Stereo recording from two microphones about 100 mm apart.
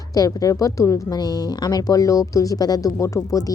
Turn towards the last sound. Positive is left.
turn(degrees=35)  # may be behind; listen again after turning